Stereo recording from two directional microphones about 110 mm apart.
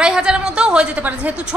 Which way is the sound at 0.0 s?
5° right (ahead or behind).